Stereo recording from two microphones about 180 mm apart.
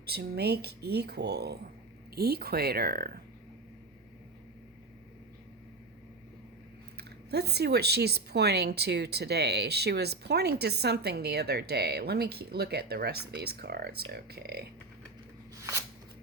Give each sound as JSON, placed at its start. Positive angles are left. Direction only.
{"t": 0.0, "sound": "speech", "side_deg": -60}
{"t": 6.9, "sound": "speech", "side_deg": -65}